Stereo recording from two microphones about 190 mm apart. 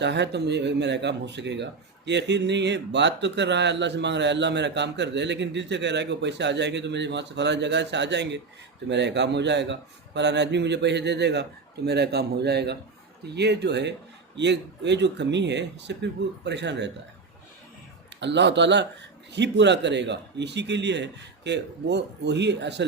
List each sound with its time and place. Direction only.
0.0 s speech: 65° right (ahead or behind)
18.2 s speech: 65° right (ahead or behind)